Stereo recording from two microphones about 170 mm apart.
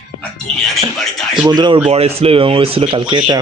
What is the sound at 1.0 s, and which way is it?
Speech, centre (ahead or behind).